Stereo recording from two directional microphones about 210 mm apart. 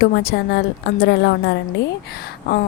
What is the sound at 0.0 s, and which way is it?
A woman's voice, 50° left (ahead or behind).